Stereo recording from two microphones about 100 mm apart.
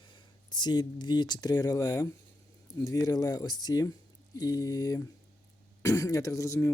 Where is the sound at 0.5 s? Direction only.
45° left (ahead or behind).